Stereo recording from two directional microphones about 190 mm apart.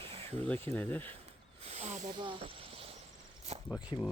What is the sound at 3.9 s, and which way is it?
Speech, 20° left (ahead or behind).